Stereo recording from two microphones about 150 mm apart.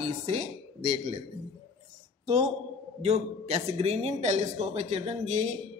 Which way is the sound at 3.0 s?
45° right (ahead or behind).